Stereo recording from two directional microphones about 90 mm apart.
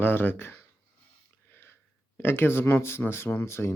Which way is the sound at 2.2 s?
25° left (ahead or behind).